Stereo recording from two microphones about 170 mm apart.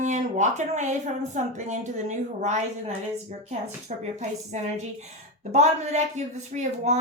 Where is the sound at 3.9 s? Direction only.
45° right (ahead or behind).